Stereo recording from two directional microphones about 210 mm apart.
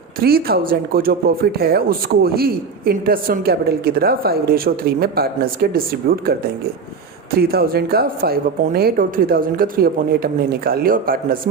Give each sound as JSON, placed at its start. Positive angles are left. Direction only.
{"t": 0.2, "sound": "speech", "side_deg": -45}